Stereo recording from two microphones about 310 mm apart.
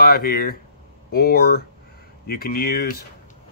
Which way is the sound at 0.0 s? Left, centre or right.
Left.